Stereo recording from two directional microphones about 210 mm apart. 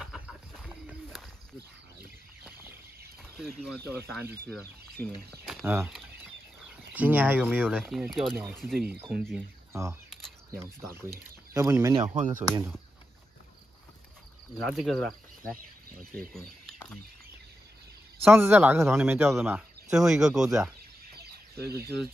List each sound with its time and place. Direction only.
0.0 s a sound: centre (ahead or behind)
3.5 s speech: centre (ahead or behind)
5.4 s a sound: centre (ahead or behind)
5.8 s a man's voice: 5° right (ahead or behind)
14.6 s speech: centre (ahead or behind)
18.2 s a man's voice: 10° right (ahead or behind)
21.1 s fowl: 50° right (ahead or behind)